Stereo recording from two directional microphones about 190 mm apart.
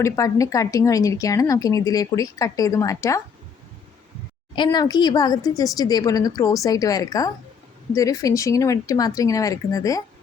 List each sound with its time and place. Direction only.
0.0 s a woman's voice: 15° left (ahead or behind)
4.5 s a woman's voice: 25° left (ahead or behind)